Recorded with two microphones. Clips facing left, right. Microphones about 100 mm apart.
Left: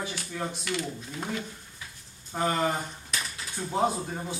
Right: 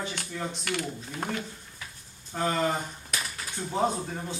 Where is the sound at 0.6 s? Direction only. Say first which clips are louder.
Even; 55° right (ahead or behind).